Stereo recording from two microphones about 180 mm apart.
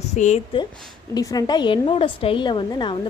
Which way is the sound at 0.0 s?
40° left (ahead or behind).